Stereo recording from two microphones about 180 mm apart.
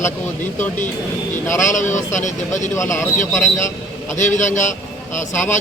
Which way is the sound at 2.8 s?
15° left (ahead or behind).